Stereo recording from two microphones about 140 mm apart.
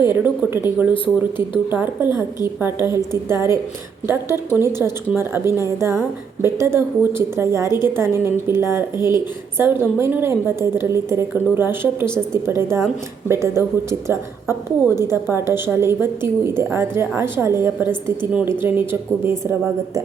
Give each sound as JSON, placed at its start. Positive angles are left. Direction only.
{"t": 0.0, "sound": "a woman's voice", "side_deg": -15}
{"t": 2.0, "sound": "a woman's voice", "side_deg": 30}
{"t": 2.6, "sound": "a woman's voice", "side_deg": -15}